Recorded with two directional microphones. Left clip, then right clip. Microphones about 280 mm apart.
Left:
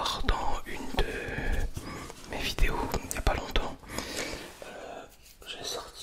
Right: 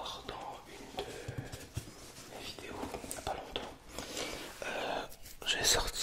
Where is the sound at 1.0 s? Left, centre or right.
Left.